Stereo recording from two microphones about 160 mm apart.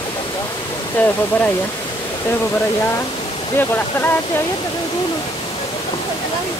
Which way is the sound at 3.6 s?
15° left (ahead or behind).